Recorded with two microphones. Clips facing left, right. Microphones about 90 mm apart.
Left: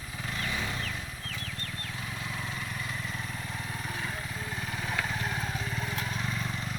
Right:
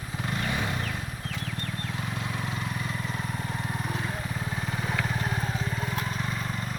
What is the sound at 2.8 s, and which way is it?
Vehicle, 20° right (ahead or behind).